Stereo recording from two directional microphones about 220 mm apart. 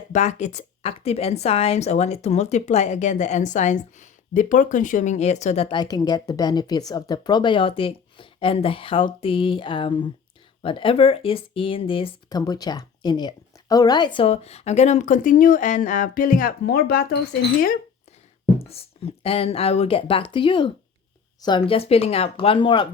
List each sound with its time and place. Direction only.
0.1 s a woman's voice: 30° left (ahead or behind)
18.6 s a woman's voice: 25° left (ahead or behind)